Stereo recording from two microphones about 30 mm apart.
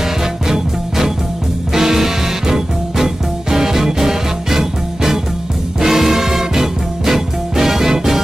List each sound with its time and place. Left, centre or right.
0.0 s music: centre